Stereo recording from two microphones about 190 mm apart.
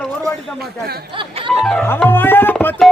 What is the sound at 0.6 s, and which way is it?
Speech, 55° right (ahead or behind).